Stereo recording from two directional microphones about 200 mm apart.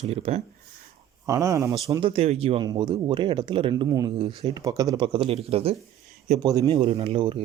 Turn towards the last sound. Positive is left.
turn(degrees=-25)  # may be behind; listen again after turning